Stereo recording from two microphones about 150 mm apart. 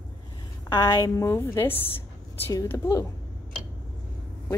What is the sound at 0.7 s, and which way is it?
A woman's voice, 20° left (ahead or behind).